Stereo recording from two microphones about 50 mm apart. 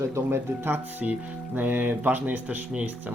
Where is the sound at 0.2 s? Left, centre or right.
Right.